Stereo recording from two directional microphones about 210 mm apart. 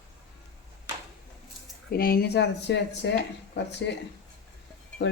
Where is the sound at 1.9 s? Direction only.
45° left (ahead or behind).